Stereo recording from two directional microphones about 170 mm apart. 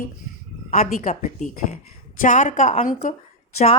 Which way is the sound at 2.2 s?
50° left (ahead or behind).